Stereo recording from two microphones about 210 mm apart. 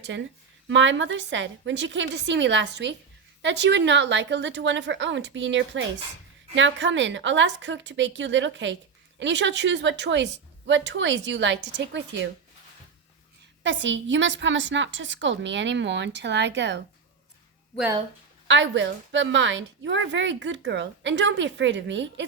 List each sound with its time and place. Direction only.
0.7 s a woman's voice: 60° right (ahead or behind)
13.6 s a woman's voice: 60° right (ahead or behind)
18.4 s a woman's voice: 60° right (ahead or behind)